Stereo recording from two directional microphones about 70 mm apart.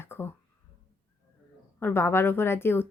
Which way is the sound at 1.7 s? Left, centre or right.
Left.